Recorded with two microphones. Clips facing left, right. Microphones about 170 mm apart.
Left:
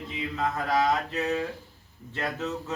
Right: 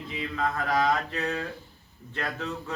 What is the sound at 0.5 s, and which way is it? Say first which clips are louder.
Mantra: left 1 dB; 20° left (ahead or behind).